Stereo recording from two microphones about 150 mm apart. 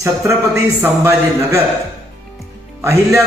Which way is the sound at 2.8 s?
20° right (ahead or behind).